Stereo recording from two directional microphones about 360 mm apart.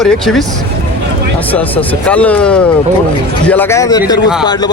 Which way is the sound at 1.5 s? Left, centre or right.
Centre.